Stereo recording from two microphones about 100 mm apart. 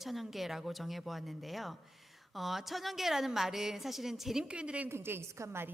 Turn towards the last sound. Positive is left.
turn(degrees=-25)  # may be behind; listen again after turning